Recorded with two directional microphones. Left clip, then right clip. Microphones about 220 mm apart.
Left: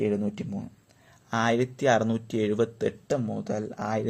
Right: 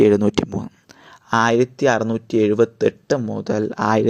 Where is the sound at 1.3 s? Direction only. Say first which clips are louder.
Right 9 dB; 30° right (ahead or behind).